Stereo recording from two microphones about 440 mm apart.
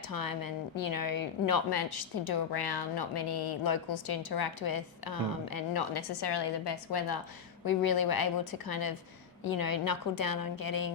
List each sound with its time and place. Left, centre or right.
0.1 s a woman's voice: left